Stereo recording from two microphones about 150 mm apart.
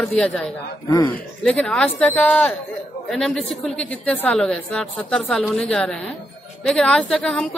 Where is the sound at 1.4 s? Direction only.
5° left (ahead or behind).